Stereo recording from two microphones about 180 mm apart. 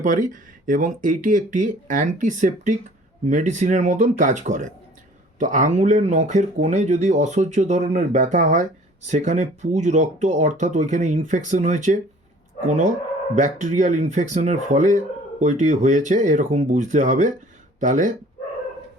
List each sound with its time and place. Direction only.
0.0 s speech: 45° right (ahead or behind)